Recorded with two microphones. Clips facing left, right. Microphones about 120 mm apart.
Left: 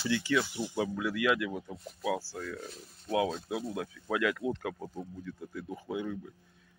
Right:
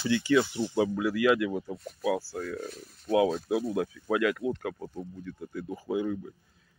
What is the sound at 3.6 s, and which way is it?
Speech, 25° right (ahead or behind).